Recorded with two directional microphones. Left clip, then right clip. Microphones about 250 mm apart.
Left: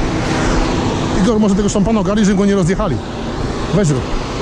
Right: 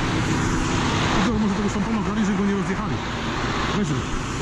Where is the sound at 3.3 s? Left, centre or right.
Right.